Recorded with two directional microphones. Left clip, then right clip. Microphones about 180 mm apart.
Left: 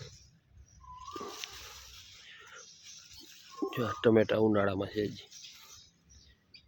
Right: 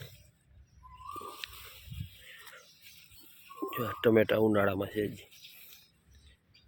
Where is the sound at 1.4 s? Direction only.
65° right (ahead or behind).